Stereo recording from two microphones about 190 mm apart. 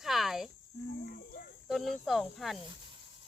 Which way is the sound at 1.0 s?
50° left (ahead or behind).